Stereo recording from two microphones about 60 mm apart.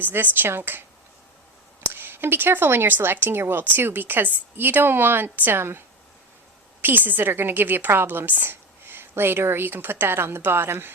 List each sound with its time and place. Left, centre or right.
0.0 s a woman's voice: right
6.8 s a woman's voice: right